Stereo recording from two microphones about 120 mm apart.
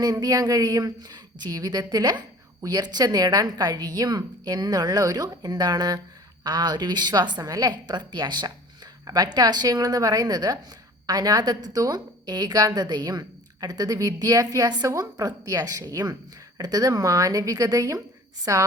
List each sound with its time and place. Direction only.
0.0 s speech: 30° right (ahead or behind)